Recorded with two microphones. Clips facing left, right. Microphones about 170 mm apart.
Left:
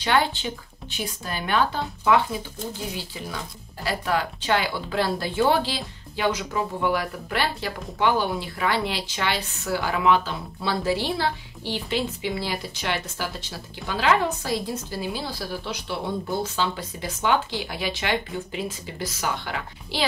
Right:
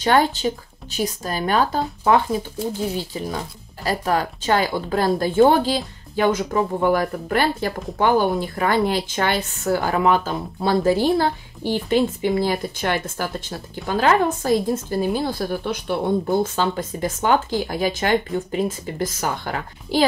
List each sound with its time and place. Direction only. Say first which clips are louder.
0.0 s speech: right 5 dB; 45° right (ahead or behind)